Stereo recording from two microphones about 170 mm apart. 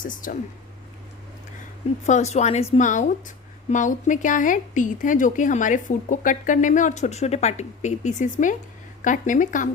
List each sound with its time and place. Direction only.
0.0 s a woman's voice: 50° left (ahead or behind)
2.0 s a woman's voice: 40° left (ahead or behind)